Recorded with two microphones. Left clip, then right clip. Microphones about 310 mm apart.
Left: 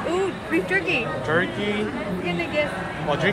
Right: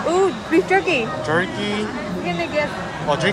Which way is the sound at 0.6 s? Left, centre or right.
Right.